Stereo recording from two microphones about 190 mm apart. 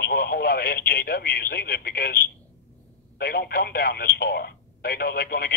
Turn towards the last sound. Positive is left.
turn(degrees=55)  # may be behind; listen again after turning